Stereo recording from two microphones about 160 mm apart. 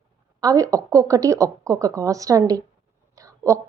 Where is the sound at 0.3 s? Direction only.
20° right (ahead or behind).